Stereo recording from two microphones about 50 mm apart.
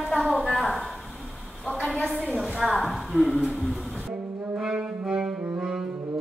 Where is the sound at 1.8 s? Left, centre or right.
Centre.